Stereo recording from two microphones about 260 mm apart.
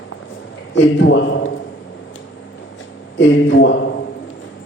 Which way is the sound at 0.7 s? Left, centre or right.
Left.